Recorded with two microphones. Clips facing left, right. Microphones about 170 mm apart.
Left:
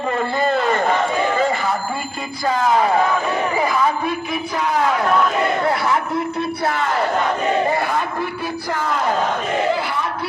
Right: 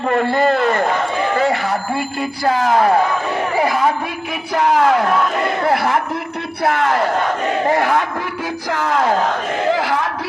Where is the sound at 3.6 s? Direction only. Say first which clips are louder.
Right 4 dB; 70° right (ahead or behind).